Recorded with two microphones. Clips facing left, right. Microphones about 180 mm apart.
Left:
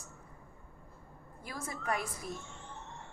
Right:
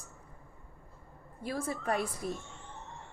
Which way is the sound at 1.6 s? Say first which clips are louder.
Right 3 dB; 30° right (ahead or behind).